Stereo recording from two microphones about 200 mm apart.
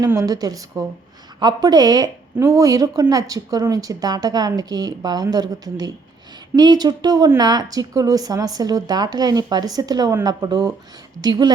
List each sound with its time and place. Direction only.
0.0 s a woman's voice: 15° right (ahead or behind)